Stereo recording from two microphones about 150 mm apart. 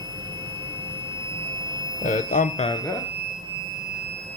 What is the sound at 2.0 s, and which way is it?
Speech, 60° left (ahead or behind).